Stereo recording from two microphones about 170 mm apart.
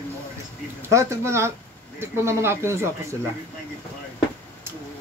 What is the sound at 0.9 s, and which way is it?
Speech, 15° right (ahead or behind).